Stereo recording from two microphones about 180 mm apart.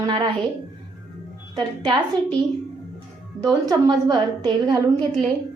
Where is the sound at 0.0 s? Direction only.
25° right (ahead or behind).